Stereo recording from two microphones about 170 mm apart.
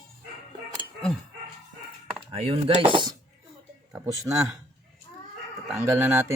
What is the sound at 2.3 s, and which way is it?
Speech, 35° right (ahead or behind).